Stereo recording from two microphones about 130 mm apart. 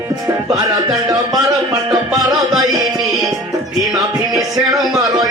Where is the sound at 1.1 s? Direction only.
30° right (ahead or behind).